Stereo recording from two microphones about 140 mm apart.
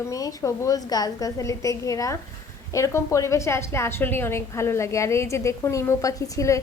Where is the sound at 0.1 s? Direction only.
25° left (ahead or behind).